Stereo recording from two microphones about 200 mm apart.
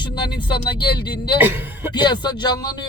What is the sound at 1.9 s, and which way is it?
Speech, 20° left (ahead or behind).